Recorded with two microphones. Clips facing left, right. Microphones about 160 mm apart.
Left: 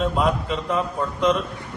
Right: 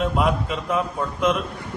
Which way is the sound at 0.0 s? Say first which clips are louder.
Even; 5° right (ahead or behind).